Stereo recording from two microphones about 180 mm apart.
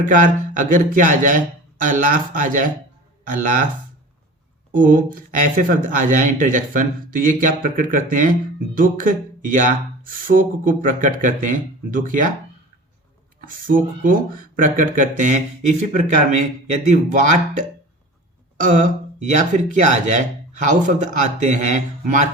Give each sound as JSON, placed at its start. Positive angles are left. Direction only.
{"t": 0.0, "sound": "speech", "side_deg": -45}
{"t": 4.7, "sound": "speech", "side_deg": -45}
{"t": 13.7, "sound": "speech", "side_deg": -50}
{"t": 18.6, "sound": "speech", "side_deg": -45}